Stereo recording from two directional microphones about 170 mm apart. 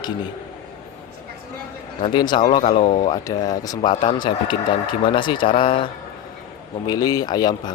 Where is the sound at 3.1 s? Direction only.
20° left (ahead or behind).